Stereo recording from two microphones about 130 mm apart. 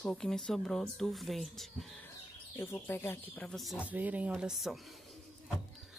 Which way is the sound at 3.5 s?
Centre (ahead or behind).